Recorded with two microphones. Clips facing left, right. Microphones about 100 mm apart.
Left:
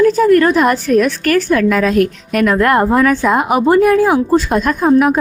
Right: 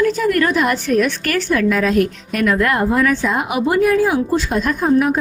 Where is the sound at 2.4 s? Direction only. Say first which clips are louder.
Left 4 dB; 45° left (ahead or behind).